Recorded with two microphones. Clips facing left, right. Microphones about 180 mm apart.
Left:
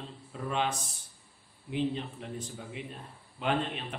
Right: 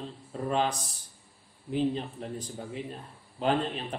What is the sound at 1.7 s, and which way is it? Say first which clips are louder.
A man's voice: right 3 dB; 40° right (ahead or behind).